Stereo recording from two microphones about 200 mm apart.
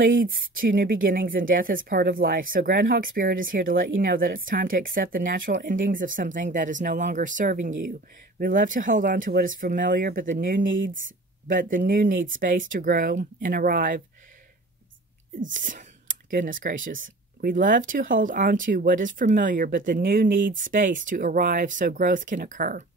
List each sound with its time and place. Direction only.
0.0 s speech: 45° right (ahead or behind)
15.4 s speech: 40° right (ahead or behind)